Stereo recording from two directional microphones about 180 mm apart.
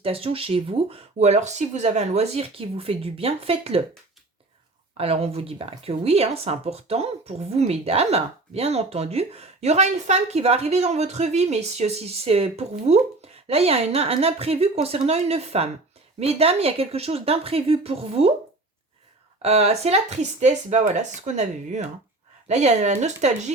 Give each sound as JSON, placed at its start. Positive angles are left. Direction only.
{"t": 0.0, "sound": "a woman's voice", "side_deg": -30}
{"t": 4.9, "sound": "a woman's voice", "side_deg": -35}
{"t": 19.4, "sound": "a woman's voice", "side_deg": -35}